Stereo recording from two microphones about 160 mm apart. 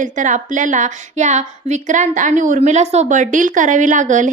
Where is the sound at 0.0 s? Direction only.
50° right (ahead or behind).